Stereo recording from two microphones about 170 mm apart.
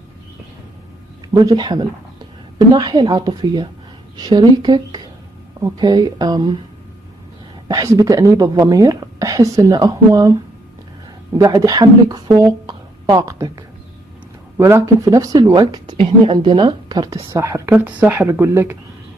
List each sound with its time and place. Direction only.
1.3 s a woman's voice: 25° right (ahead or behind)
7.6 s a woman's voice: 20° right (ahead or behind)
11.3 s a woman's voice: 20° right (ahead or behind)